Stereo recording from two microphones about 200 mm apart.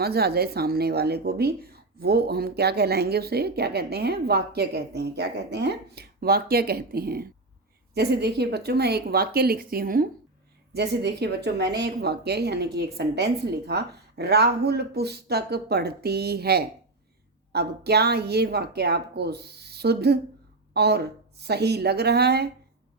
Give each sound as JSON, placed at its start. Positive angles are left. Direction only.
{"t": 0.0, "sound": "speech", "side_deg": -50}